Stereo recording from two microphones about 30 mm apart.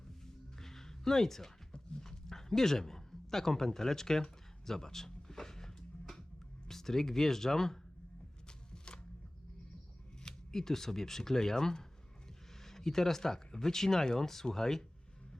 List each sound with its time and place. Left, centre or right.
0.6 s music: centre
1.7 s dog: left
2.2 s a sound: centre
6.7 s speech: centre
8.4 s shuffling cards: left
10.5 s speech: centre